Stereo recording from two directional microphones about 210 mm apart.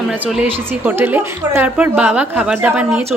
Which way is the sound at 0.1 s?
5° right (ahead or behind).